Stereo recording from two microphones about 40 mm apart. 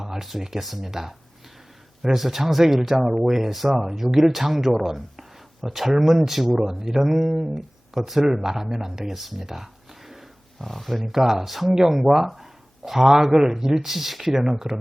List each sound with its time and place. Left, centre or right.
0.0 s speech: centre
10.6 s speech: centre
11.0 s speech: centre